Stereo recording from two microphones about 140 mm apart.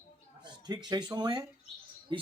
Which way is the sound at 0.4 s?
30° right (ahead or behind).